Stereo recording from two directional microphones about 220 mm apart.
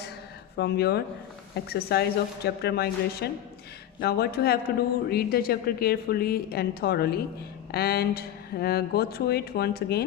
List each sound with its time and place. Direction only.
0.5 s speech: 45° left (ahead or behind)